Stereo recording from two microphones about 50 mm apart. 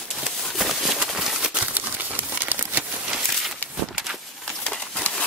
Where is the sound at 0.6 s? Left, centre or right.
Centre.